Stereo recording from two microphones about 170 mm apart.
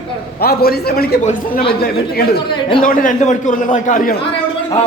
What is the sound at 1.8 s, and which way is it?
Speech, 65° left (ahead or behind).